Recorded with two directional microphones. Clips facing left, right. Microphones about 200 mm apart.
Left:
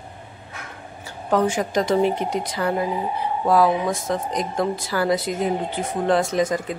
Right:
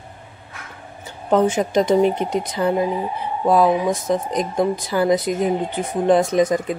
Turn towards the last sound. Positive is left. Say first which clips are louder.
# right 4 dB
turn(degrees=-20)  # may be behind; listen again after turning